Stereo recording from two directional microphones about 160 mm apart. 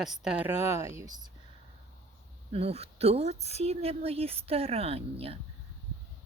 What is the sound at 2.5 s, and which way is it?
Speech, 40° right (ahead or behind).